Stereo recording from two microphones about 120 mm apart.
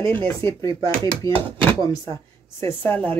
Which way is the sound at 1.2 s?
40° right (ahead or behind).